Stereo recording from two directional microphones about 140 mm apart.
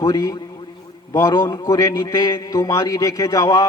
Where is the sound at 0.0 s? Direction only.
25° left (ahead or behind).